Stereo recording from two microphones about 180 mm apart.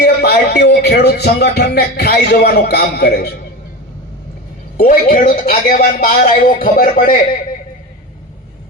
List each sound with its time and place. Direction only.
0.0 s a man's voice: 60° left (ahead or behind)
4.8 s speech: 50° left (ahead or behind)